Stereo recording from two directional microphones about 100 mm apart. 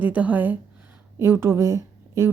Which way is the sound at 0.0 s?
15° right (ahead or behind).